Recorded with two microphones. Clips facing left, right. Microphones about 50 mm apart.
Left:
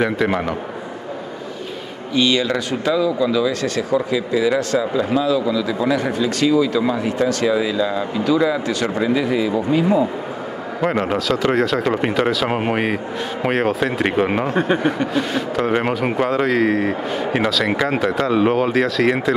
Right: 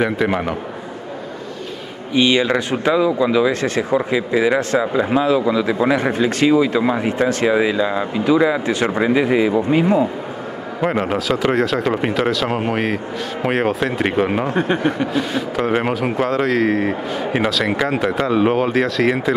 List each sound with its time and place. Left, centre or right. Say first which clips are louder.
0.0 s a man's voice: even; centre
2.1 s speech: right 2 dB; right
10.8 s speech: even; centre